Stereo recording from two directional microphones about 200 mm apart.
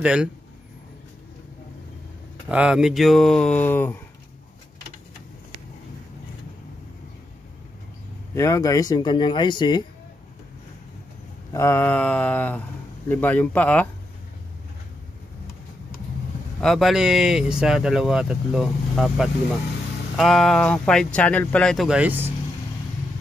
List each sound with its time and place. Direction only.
0.0 s speech: 5° right (ahead or behind)
2.4 s speech: 5° right (ahead or behind)
8.4 s speech: 15° left (ahead or behind)
11.5 s mantra: 15° left (ahead or behind)
16.6 s speech: centre (ahead or behind)